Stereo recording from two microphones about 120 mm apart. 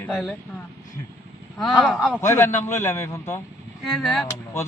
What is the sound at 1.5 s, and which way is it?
Speech, centre (ahead or behind).